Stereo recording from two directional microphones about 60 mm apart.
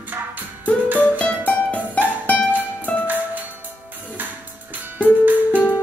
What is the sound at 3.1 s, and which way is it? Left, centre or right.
Music, right.